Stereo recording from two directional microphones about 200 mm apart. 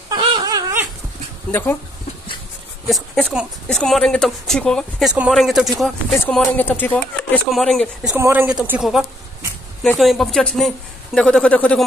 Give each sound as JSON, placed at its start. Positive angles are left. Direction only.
{"t": 0.1, "sound": "dog", "side_deg": -20}
{"t": 1.5, "sound": "speech", "side_deg": 10}
{"t": 2.9, "sound": "speech", "side_deg": 0}